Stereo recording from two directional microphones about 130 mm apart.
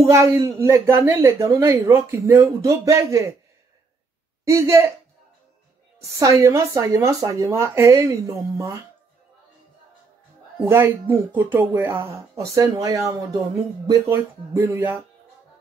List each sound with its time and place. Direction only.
0.0 s speech: 20° right (ahead or behind)
4.5 s speech: 20° right (ahead or behind)
6.1 s speech: 25° right (ahead or behind)
10.7 s speech: 15° right (ahead or behind)